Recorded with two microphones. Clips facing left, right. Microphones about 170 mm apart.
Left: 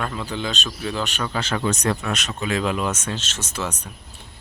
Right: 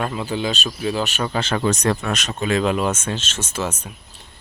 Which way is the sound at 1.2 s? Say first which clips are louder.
Right 3 dB; 30° right (ahead or behind).